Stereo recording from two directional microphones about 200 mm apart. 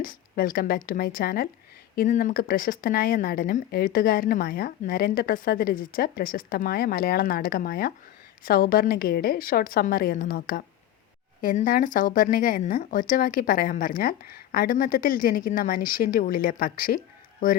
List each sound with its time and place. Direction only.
0.0 s speech: 45° left (ahead or behind)